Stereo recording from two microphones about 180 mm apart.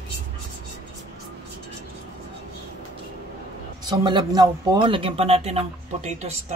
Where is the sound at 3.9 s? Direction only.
25° right (ahead or behind).